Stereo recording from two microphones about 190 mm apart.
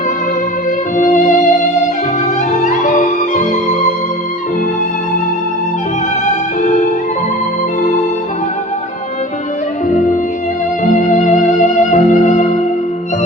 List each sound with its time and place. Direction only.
0.9 s music: 45° left (ahead or behind)
6.6 s music: 40° left (ahead or behind)
9.9 s music: 45° left (ahead or behind)